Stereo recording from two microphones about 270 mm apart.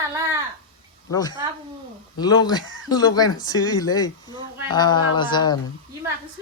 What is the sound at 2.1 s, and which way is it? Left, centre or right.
A man's voice, centre.